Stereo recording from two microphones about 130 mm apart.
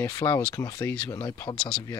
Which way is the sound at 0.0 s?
20° left (ahead or behind).